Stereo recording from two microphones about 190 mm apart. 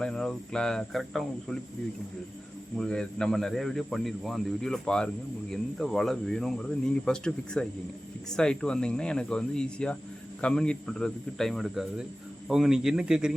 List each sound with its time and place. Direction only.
0.0 s a man's voice: 5° left (ahead or behind)
2.7 s a man's voice: 5° left (ahead or behind)